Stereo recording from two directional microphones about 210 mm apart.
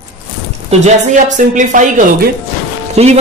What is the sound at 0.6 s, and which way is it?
Speech, 35° right (ahead or behind).